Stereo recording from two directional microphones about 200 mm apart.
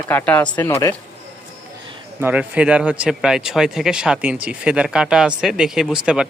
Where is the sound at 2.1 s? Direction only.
10° right (ahead or behind).